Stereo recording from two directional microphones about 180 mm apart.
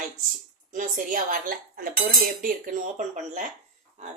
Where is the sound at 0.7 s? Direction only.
45° right (ahead or behind).